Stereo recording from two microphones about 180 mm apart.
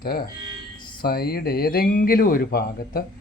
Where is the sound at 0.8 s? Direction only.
25° left (ahead or behind).